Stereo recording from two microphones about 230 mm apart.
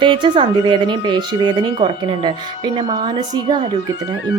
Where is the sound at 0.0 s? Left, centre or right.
Centre.